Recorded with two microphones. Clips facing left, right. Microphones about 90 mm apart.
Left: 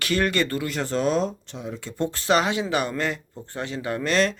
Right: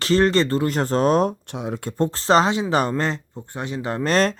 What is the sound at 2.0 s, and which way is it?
Speech, 35° right (ahead or behind).